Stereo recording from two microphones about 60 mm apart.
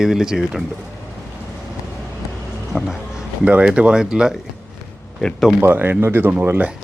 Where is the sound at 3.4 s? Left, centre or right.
Right.